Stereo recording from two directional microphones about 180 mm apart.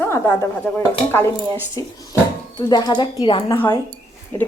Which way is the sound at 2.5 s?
25° left (ahead or behind).